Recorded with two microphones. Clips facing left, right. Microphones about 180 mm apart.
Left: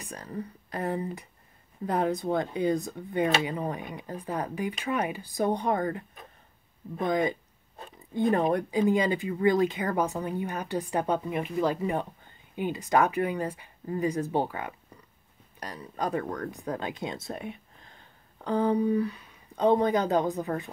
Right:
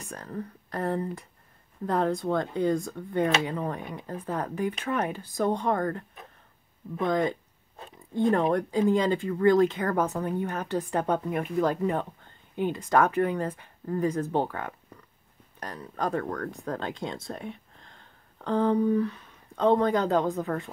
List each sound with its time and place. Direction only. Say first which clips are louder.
0.0 s speech: right 1 dB; 15° left (ahead or behind)
7.1 s speech: even; 10° left (ahead or behind)
13.1 s a woman's voice: right 2 dB; 5° left (ahead or behind)